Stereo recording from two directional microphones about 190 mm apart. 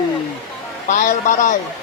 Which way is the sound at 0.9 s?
40° left (ahead or behind).